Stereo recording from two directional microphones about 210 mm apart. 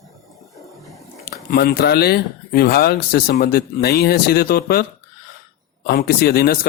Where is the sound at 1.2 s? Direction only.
45° left (ahead or behind).